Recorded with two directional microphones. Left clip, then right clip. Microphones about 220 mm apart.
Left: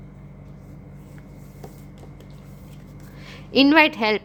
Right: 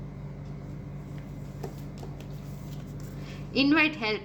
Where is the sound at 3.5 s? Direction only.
50° left (ahead or behind).